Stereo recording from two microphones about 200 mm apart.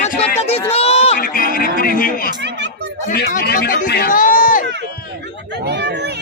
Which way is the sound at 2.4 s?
60° right (ahead or behind).